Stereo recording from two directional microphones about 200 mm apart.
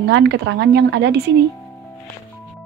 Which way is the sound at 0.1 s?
60° right (ahead or behind).